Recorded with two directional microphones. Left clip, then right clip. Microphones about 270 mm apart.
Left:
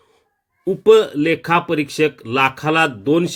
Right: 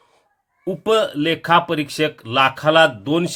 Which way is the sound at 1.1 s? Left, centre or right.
Centre.